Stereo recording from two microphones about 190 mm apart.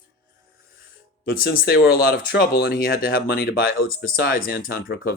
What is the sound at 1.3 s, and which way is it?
Speech, 50° left (ahead or behind).